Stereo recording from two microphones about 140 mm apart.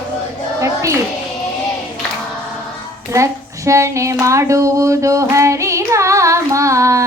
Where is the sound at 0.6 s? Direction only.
20° right (ahead or behind).